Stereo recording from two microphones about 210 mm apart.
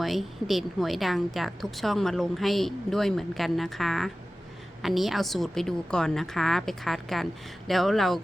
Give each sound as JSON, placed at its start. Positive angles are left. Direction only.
{"t": 0.0, "sound": "a woman's voice", "side_deg": 0}